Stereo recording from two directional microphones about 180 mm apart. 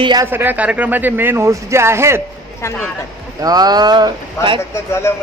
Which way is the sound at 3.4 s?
20° right (ahead or behind).